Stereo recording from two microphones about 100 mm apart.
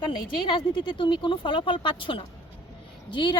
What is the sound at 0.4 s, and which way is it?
Speech, 55° left (ahead or behind).